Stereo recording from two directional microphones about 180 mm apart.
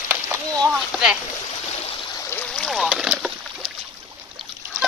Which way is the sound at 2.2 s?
10° left (ahead or behind).